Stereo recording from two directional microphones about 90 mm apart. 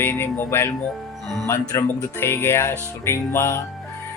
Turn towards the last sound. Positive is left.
turn(degrees=30)  # may be behind; listen again after turning